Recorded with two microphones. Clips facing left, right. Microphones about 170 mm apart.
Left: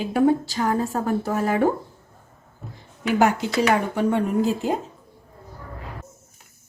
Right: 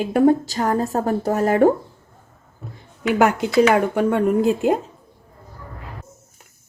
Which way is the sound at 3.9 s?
55° right (ahead or behind).